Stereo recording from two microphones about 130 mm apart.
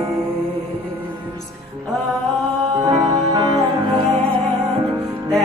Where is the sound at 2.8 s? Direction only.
25° right (ahead or behind).